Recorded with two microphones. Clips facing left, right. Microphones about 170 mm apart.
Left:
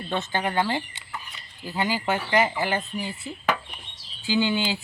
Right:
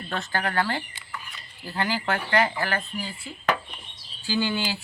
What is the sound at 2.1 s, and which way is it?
Speech, 5° left (ahead or behind).